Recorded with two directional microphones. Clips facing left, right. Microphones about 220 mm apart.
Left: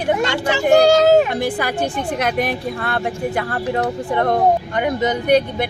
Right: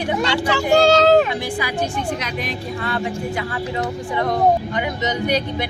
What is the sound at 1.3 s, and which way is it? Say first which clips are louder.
Speech: left 3 dB; 55° left (ahead or behind).